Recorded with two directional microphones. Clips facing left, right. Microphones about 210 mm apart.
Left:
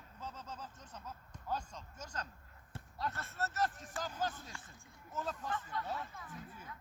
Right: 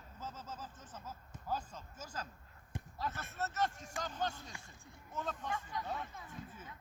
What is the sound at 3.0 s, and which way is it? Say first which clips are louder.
Speech: left 1 dB; centre (ahead or behind).